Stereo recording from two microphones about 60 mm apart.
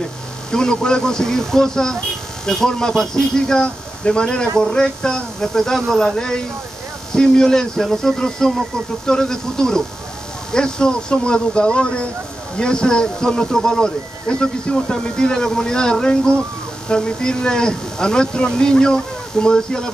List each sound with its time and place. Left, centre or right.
0.5 s speech: centre